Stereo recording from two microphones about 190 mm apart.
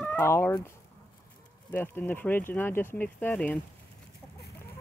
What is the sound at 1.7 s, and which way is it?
Speech, 10° left (ahead or behind).